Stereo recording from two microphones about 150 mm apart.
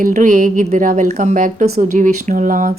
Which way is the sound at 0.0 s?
60° right (ahead or behind).